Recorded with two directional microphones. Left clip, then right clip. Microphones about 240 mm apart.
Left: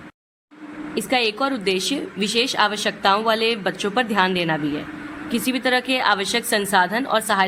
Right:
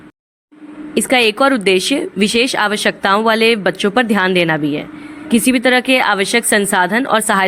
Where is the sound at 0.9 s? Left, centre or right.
Right.